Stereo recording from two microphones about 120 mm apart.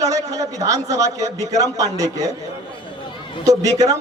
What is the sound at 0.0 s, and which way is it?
A man's voice, 30° right (ahead or behind).